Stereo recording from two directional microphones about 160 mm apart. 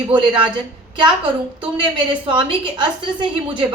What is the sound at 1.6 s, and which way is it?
A woman's voice, 30° right (ahead or behind).